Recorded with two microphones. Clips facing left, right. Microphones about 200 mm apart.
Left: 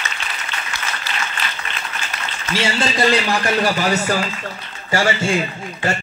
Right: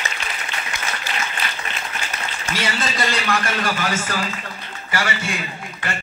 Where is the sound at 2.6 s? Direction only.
30° left (ahead or behind).